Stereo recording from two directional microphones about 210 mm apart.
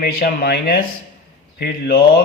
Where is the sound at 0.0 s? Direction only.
50° left (ahead or behind).